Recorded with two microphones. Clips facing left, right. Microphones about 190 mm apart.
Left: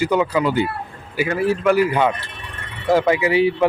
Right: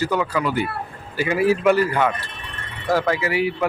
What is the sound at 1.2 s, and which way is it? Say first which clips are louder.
Speech: right 1 dB; 10° right (ahead or behind).